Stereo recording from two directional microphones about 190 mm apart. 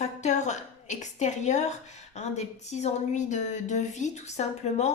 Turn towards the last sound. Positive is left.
turn(degrees=35)  # may be behind; listen again after turning